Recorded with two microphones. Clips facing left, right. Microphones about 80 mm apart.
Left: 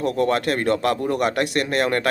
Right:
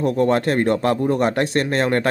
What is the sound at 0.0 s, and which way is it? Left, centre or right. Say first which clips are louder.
Speech: right 3 dB; right.